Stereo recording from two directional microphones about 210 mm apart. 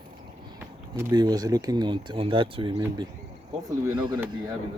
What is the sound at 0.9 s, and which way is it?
Speech, 15° right (ahead or behind).